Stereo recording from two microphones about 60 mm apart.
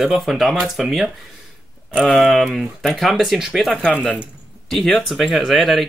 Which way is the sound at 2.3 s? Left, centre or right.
Centre.